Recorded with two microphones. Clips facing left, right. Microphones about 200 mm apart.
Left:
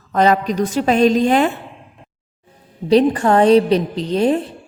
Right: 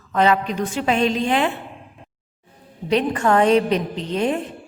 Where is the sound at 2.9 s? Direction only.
35° left (ahead or behind).